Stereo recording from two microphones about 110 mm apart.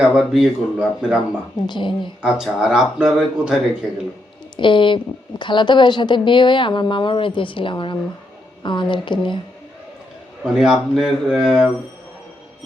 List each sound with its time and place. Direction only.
0.2 s speech: centre (ahead or behind)
1.5 s a woman's voice: 45° left (ahead or behind)
2.2 s speech: 5° right (ahead or behind)
4.5 s a woman's voice: 50° left (ahead or behind)
10.4 s speech: 5° right (ahead or behind)